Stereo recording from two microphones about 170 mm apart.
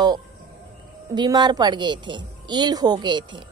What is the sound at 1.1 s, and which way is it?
A woman's voice, 25° right (ahead or behind).